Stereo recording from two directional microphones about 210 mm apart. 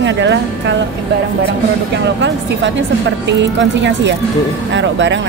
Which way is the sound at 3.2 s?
60° right (ahead or behind).